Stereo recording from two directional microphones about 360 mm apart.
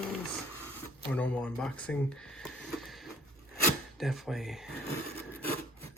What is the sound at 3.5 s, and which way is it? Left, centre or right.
Rub, centre.